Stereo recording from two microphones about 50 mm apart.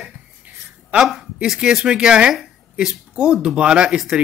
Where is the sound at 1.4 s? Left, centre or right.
Centre.